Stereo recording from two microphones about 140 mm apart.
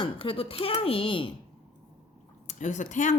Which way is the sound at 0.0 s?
40° left (ahead or behind).